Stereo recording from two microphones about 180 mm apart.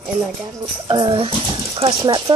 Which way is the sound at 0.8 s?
25° right (ahead or behind).